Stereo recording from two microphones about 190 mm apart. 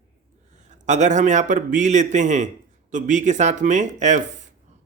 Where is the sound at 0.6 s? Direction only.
40° right (ahead or behind).